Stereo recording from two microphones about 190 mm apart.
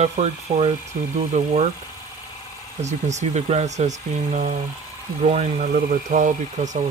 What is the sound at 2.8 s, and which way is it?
Speech, 35° right (ahead or behind).